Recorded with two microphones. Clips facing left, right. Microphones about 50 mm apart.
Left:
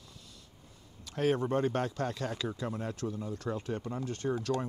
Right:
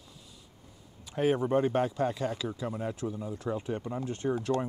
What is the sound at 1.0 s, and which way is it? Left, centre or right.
Speech, centre.